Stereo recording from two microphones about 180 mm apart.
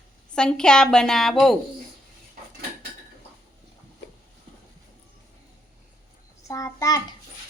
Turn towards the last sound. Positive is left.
turn(degrees=20)  # may be behind; listen again after turning